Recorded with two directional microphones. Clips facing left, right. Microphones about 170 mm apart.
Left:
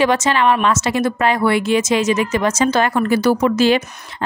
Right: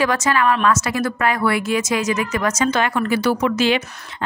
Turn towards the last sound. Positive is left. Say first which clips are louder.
# left 4 dB
turn(degrees=40)  # may be behind; listen again after turning